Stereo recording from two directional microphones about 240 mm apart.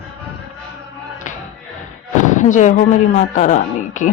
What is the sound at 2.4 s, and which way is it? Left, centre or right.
Speech, left.